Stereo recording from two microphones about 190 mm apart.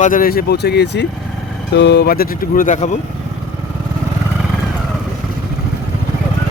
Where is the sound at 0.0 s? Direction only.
45° left (ahead or behind).